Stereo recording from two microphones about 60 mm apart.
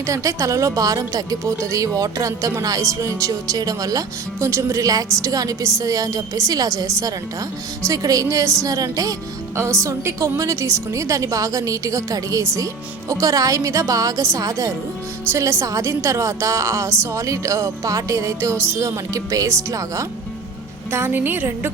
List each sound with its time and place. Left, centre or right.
0.1 s a woman's voice: right
1.5 s a woman's voice: right
4.4 s speech: right
4.8 s a woman's voice: right
9.6 s a woman's voice: right
15.3 s a woman's voice: right
20.9 s a woman's voice: right